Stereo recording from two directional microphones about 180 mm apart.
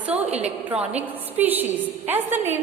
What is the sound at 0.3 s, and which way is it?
Speech, 35° right (ahead or behind).